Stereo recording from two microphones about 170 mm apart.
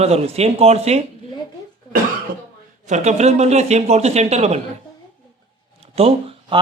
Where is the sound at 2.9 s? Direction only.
40° right (ahead or behind).